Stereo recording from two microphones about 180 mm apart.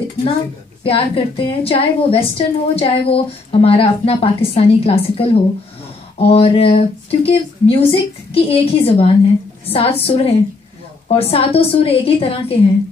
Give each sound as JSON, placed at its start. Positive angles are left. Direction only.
{"t": 0.8, "sound": "a woman's voice", "side_deg": 30}